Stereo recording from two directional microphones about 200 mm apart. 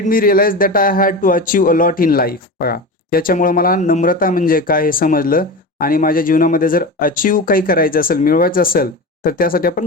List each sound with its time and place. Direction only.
0.0 s a man's voice: 45° left (ahead or behind)